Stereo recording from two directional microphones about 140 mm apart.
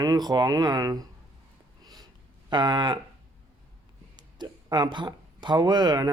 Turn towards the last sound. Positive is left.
turn(degrees=-30)  # may be behind; listen again after turning